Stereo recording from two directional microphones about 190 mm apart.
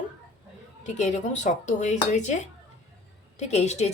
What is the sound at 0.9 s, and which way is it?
A woman's voice, 40° left (ahead or behind).